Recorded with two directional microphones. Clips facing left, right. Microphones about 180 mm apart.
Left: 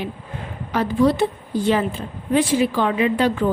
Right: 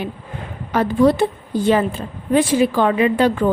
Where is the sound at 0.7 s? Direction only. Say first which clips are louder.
Right 3 dB; 50° right (ahead or behind).